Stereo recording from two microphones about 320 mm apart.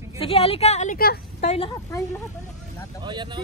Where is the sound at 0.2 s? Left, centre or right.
Centre.